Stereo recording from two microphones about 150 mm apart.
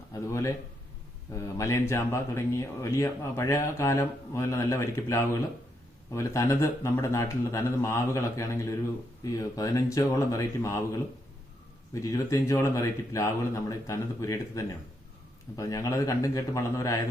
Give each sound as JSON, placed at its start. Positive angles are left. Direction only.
{"t": 0.1, "sound": "a man's voice", "side_deg": 20}